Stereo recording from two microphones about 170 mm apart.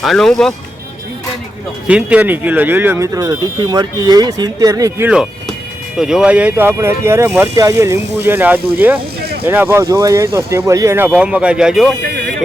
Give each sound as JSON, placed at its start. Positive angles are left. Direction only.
{"t": 0.0, "sound": "speech", "side_deg": 0}
{"t": 1.9, "sound": "speech", "side_deg": -5}
{"t": 6.0, "sound": "speech", "side_deg": -5}